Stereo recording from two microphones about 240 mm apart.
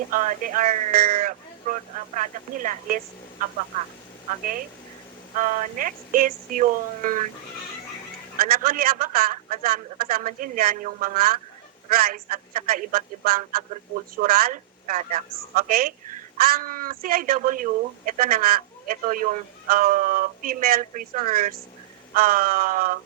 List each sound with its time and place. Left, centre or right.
0.1 s speech: right
5.4 s speech: right
8.4 s speech: right